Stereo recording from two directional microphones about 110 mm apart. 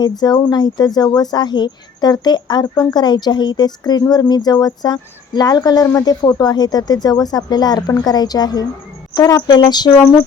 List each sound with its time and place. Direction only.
0.0 s speech: 40° left (ahead or behind)